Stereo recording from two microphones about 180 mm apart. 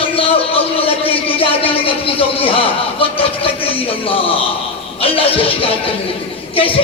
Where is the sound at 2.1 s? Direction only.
30° left (ahead or behind).